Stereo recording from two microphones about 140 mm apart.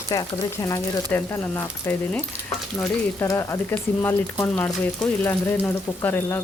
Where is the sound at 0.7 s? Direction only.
20° left (ahead or behind).